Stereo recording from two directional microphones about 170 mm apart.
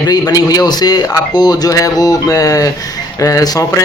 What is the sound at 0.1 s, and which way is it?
Speech, 20° left (ahead or behind).